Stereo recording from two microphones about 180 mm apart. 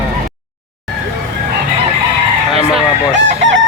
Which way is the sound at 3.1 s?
85° right.